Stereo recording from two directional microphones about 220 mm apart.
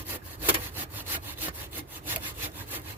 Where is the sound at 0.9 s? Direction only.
10° right (ahead or behind).